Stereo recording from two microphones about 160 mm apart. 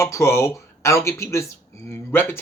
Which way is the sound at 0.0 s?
15° left (ahead or behind).